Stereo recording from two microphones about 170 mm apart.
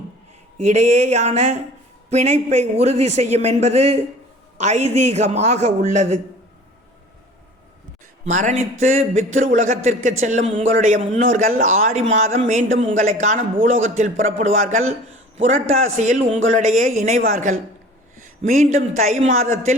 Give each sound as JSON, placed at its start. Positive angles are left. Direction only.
{"t": 0.6, "sound": "a man's voice", "side_deg": -45}
{"t": 8.2, "sound": "a man's voice", "side_deg": -45}